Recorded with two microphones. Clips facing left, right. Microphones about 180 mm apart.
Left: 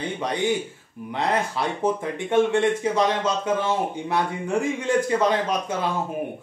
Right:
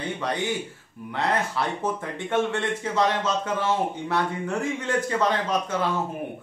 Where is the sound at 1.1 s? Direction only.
15° left (ahead or behind).